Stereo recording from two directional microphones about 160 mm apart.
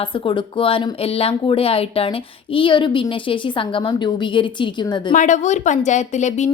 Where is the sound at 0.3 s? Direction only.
30° left (ahead or behind).